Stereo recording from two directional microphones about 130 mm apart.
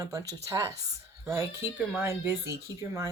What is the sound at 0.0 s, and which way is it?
Speech, 25° right (ahead or behind).